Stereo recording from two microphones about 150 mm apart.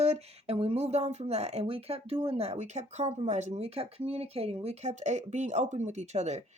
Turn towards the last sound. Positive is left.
turn(degrees=-50)  # may be behind; listen again after turning